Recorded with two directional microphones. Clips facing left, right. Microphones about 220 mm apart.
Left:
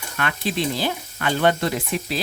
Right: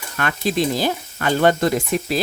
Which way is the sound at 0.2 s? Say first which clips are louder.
Right 4 dB; 45° right (ahead or behind).